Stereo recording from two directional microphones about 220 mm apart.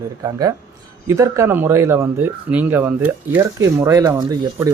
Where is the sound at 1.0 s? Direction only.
15° right (ahead or behind).